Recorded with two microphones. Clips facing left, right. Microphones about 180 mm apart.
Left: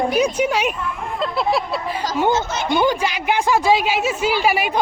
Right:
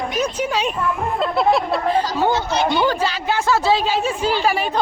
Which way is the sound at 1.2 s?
Centre (ahead or behind).